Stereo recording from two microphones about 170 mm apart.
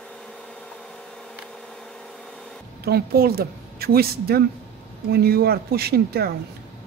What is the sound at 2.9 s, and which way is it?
A woman's voice, 65° right (ahead or behind).